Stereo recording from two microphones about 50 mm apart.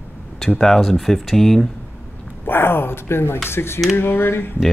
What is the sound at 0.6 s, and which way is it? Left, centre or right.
Speech, centre.